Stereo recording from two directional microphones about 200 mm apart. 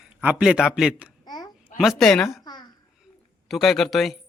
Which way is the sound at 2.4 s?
20° left (ahead or behind).